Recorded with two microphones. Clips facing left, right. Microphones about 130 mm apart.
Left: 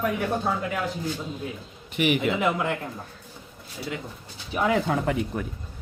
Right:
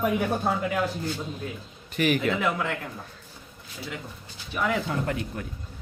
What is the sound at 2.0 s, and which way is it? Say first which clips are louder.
Speech: left 1 dB; 20° left (ahead or behind).